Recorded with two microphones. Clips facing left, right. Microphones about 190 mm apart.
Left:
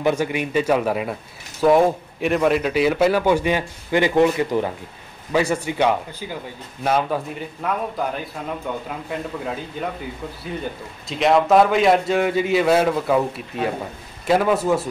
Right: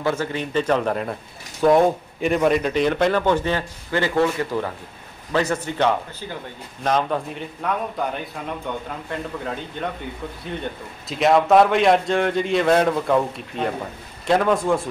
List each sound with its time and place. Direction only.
0.0 s a man's voice: 15° left (ahead or behind)